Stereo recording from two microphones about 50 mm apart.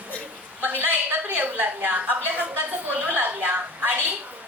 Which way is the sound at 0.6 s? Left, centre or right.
Right.